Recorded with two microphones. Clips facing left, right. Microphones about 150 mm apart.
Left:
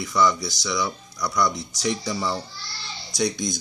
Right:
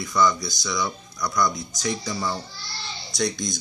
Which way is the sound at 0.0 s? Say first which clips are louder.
Even; 5° left (ahead or behind).